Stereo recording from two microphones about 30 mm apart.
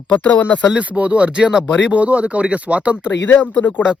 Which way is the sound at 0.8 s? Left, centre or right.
Right.